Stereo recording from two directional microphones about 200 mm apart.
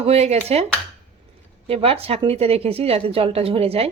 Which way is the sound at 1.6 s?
30° right (ahead or behind).